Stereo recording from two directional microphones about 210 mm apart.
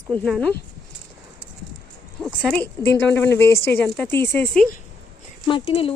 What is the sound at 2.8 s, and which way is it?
Speech, 10° left (ahead or behind).